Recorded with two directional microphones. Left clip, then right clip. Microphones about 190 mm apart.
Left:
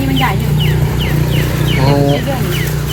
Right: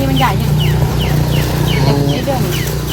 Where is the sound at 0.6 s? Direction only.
35° right (ahead or behind).